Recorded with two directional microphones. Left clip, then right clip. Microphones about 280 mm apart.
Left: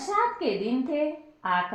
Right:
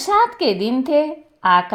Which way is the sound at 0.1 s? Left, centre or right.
Right.